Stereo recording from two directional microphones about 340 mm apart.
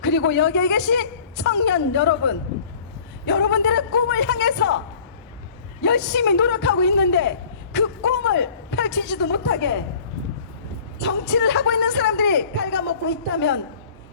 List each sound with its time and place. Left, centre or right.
0.0 s a man's voice: left
5.8 s a man's voice: left
11.0 s a man's voice: left